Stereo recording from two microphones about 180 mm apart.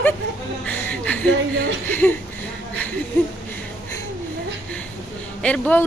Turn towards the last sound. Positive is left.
turn(degrees=5)  # may be behind; listen again after turning